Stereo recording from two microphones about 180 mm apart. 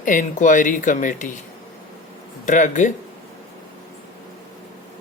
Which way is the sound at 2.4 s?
45° left (ahead or behind).